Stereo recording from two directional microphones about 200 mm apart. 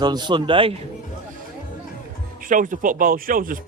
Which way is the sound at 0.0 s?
20° right (ahead or behind).